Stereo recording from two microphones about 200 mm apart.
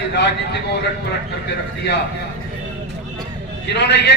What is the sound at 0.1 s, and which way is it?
Speech, 55° left (ahead or behind).